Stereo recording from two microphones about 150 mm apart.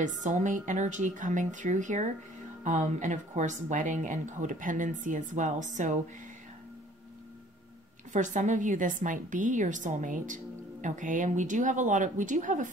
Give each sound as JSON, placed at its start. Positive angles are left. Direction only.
{"t": 0.0, "sound": "a woman's voice", "side_deg": -55}
{"t": 8.1, "sound": "a woman's voice", "side_deg": -55}